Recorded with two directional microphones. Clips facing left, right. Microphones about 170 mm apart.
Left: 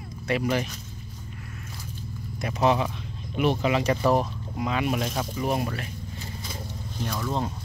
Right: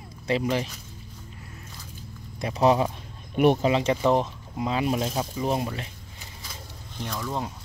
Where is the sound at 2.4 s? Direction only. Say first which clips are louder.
Right 2 dB; 35° right (ahead or behind).